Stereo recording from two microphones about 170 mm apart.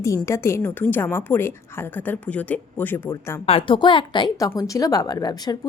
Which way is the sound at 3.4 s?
30° left (ahead or behind).